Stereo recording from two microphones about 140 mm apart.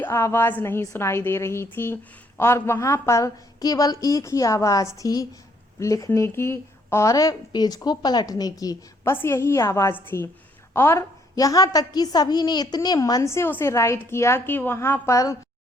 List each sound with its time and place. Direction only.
0.0 s a woman's voice: 15° left (ahead or behind)